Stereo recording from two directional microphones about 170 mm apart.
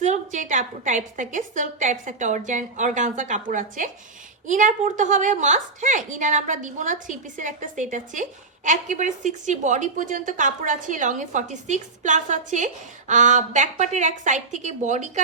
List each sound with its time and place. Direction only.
0.0 s a woman's voice: 45° right (ahead or behind)